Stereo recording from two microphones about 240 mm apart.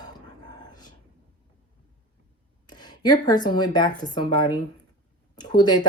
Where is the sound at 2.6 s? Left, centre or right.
Centre.